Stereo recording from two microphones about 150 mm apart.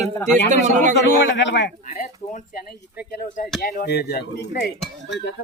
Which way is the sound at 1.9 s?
55° left (ahead or behind).